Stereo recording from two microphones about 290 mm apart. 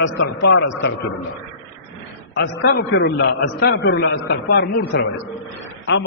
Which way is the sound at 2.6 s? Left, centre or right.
Left.